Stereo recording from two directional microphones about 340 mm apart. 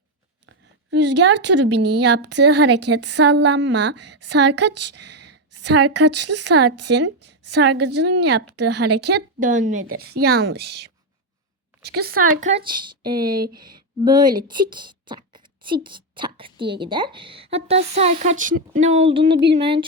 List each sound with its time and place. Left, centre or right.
0.4 s a woman's voice: right
4.7 s a woman's voice: right
5.0 s a sound: right
5.5 s a woman's voice: right
7.6 s a woman's voice: right; by 13.1 s centre
13.1 s a woman's voice: right
14.0 s speech: centre